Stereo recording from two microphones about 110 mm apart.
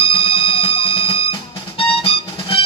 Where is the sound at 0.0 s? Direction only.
55° left (ahead or behind).